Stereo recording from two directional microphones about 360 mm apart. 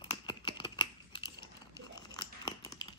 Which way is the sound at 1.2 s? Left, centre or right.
Right.